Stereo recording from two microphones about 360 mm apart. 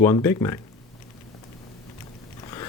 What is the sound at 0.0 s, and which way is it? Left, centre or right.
Speech, centre.